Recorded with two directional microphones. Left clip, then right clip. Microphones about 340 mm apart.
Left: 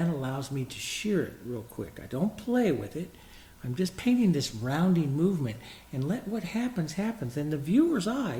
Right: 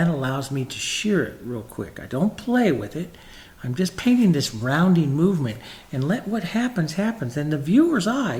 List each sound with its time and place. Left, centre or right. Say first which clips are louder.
0.0 s speech: right 8 dB; right